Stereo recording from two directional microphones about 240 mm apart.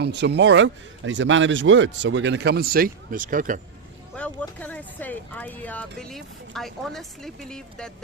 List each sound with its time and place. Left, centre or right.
0.0 s speech: right
4.1 s speech: centre